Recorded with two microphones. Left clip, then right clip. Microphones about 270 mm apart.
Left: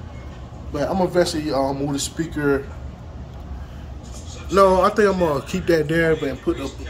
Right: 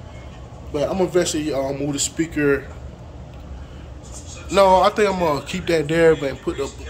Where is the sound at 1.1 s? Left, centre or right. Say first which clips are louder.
Left 1 dB; right.